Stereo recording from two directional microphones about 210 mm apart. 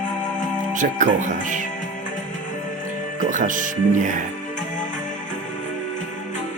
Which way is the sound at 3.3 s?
40° right (ahead or behind).